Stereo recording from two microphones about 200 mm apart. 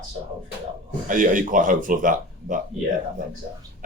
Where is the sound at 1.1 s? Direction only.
40° right (ahead or behind).